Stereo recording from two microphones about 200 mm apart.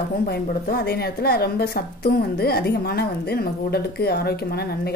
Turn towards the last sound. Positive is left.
turn(degrees=50)  # may be behind; listen again after turning